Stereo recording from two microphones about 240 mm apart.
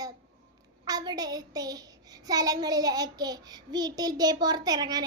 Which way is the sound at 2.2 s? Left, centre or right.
Centre.